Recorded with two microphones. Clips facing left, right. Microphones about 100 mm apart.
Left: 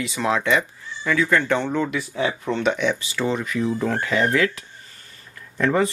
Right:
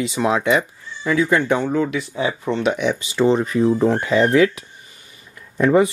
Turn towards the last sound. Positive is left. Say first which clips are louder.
# right 5 dB
turn(degrees=-20)  # may be behind; listen again after turning